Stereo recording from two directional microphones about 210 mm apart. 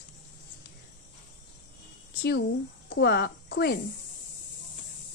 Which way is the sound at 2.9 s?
50° left (ahead or behind).